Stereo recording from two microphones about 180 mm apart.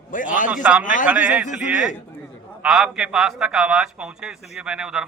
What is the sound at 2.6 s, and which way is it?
A man's voice, 5° right (ahead or behind).